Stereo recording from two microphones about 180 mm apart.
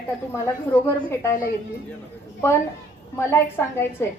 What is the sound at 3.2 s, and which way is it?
Speech, 15° left (ahead or behind).